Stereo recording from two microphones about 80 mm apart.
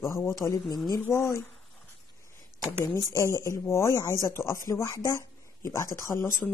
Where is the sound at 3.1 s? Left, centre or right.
Left.